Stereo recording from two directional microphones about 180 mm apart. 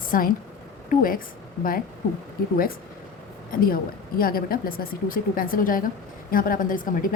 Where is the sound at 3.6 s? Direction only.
55° left (ahead or behind).